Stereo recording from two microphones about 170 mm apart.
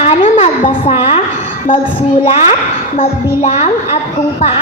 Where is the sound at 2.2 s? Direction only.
35° left (ahead or behind).